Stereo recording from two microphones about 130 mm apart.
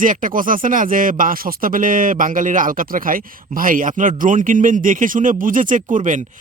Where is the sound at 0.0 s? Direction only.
90° right.